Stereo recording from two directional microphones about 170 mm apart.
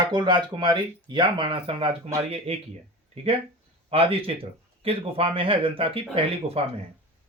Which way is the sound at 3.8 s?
35° right (ahead or behind).